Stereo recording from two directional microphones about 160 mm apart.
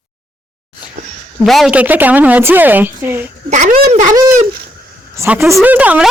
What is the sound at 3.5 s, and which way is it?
Speech, 50° right (ahead or behind).